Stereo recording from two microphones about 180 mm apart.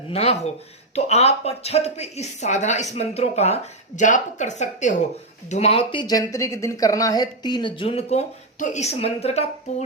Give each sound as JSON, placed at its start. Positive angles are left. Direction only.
{"t": 0.1, "sound": "speech", "side_deg": 35}